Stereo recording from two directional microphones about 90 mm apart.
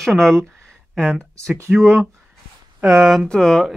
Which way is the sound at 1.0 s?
20° right (ahead or behind).